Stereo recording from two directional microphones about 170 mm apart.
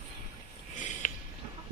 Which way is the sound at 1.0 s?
50° left (ahead or behind).